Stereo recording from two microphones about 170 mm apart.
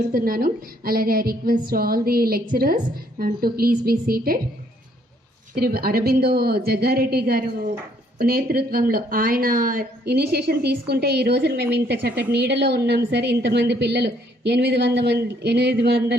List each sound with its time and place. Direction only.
0.1 s a woman's voice: 60° right (ahead or behind)
5.5 s a woman's voice: 65° right (ahead or behind)